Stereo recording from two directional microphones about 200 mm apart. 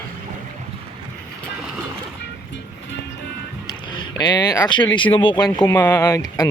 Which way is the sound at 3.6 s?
20° left (ahead or behind).